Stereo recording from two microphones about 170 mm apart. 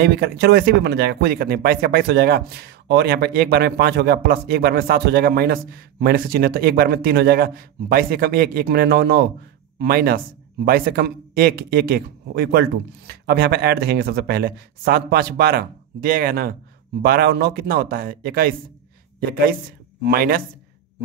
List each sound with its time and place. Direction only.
0.0 s speech: 70° right (ahead or behind)
9.8 s a man's voice: 65° right (ahead or behind)